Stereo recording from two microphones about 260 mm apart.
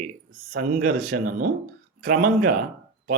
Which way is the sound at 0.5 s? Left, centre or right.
Right.